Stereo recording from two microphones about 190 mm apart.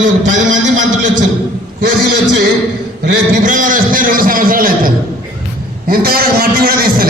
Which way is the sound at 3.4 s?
45° right (ahead or behind).